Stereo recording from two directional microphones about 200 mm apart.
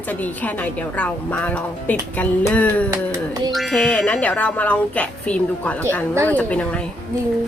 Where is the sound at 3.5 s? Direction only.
Centre (ahead or behind).